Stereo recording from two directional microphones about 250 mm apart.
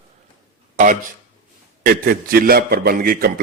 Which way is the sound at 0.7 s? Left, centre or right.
Right.